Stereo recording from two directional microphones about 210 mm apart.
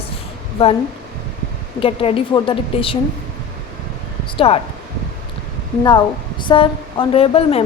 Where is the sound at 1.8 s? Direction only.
25° left (ahead or behind).